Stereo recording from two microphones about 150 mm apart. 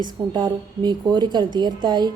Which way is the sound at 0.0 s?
30° right (ahead or behind).